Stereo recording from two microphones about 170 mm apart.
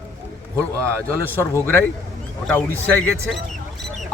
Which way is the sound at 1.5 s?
15° left (ahead or behind).